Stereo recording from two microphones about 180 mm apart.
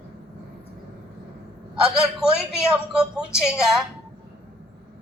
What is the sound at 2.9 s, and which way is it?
Speech, 5° right (ahead or behind).